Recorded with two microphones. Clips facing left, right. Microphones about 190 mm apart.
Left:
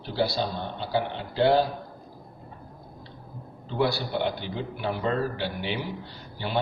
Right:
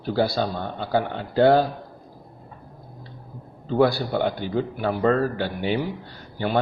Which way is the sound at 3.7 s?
50° right (ahead or behind).